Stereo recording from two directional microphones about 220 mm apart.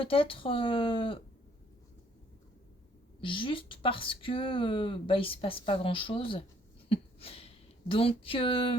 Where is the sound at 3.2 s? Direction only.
25° left (ahead or behind).